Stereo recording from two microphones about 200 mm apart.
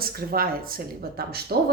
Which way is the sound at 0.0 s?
50° right (ahead or behind).